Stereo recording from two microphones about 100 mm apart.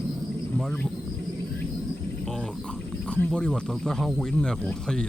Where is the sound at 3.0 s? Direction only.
10° left (ahead or behind).